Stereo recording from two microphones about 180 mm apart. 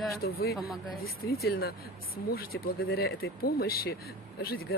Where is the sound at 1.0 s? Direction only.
60° left (ahead or behind).